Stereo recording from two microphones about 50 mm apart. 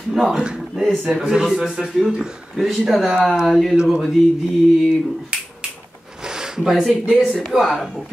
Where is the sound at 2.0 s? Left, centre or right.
Centre.